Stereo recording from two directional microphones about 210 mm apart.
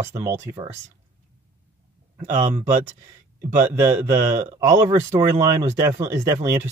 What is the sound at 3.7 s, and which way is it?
Speech, 10° right (ahead or behind).